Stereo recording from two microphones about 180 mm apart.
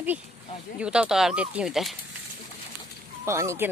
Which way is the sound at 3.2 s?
15° right (ahead or behind).